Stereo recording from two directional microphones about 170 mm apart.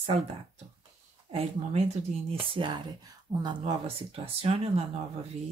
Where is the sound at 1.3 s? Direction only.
35° right (ahead or behind).